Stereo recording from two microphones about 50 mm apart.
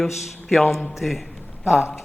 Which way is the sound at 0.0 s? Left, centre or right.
Centre.